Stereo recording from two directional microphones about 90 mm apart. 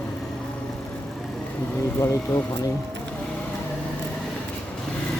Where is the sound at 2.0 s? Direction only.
35° left (ahead or behind).